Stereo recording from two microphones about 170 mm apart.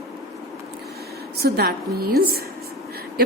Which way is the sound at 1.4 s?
70° right (ahead or behind).